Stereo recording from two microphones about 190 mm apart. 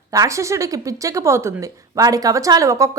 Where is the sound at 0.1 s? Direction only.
15° right (ahead or behind).